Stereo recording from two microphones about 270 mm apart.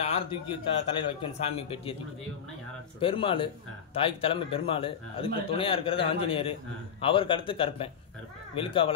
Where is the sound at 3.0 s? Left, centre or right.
Centre.